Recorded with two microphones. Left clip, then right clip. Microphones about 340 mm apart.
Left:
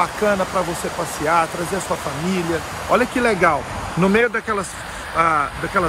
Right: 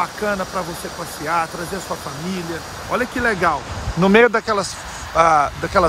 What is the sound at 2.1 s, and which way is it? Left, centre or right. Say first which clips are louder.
Speech: left 5 dB; left.